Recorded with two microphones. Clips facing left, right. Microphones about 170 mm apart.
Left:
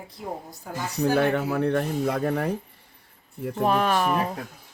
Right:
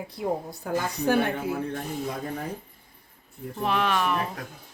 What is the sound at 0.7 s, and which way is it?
Speech, 65° right (ahead or behind).